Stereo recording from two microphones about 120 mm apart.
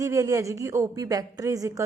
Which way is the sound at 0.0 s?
30° right (ahead or behind).